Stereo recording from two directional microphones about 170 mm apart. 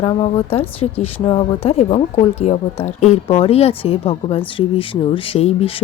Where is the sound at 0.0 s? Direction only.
35° left (ahead or behind).